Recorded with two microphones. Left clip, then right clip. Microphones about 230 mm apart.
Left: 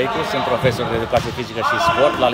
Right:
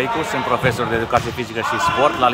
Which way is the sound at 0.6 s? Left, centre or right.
Centre.